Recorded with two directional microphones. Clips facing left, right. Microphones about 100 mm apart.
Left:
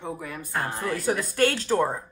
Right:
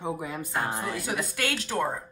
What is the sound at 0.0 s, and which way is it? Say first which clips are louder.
Speech: right 2 dB; 20° right (ahead or behind).